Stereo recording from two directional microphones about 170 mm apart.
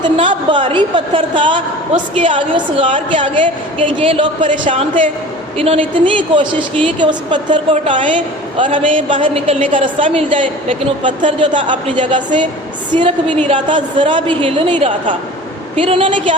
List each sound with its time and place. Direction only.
0.0 s a woman's voice: 30° right (ahead or behind)
5.5 s a woman's voice: 35° right (ahead or behind)